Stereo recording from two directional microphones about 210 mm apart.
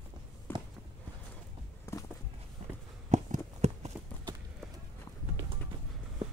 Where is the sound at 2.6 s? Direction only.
30° right (ahead or behind).